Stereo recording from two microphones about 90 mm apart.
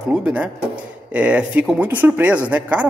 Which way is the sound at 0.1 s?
15° right (ahead or behind).